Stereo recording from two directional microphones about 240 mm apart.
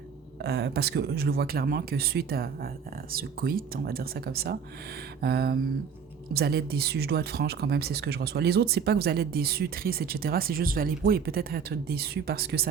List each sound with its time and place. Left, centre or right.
0.4 s speech: right